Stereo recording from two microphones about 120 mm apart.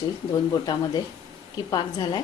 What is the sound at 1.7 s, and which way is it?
Speech, 35° left (ahead or behind).